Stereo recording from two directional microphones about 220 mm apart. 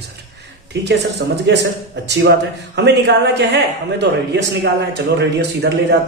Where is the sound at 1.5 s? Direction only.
50° right (ahead or behind).